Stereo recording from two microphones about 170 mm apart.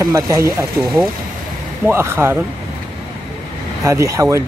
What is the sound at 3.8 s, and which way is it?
Speech, 20° right (ahead or behind).